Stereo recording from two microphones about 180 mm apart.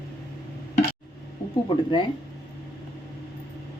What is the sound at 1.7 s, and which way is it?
Speech, 30° left (ahead or behind).